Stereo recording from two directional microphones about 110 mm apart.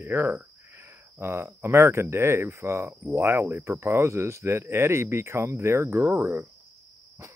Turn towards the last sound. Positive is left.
turn(degrees=-25)  # may be behind; listen again after turning